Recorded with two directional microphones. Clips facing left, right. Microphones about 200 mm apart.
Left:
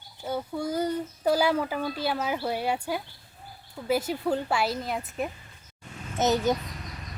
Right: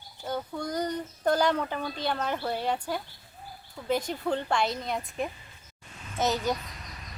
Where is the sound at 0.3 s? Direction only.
5° left (ahead or behind).